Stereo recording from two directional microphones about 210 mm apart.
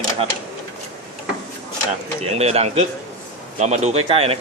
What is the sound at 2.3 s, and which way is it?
A man's voice, 30° right (ahead or behind).